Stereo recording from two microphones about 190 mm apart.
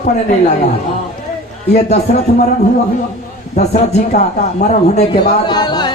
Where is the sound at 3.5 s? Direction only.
35° left (ahead or behind).